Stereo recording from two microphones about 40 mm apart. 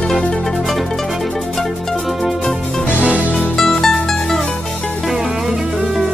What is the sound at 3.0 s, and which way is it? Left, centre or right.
Music, right.